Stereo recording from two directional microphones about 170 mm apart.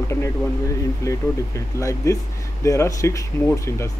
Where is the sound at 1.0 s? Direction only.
20° left (ahead or behind).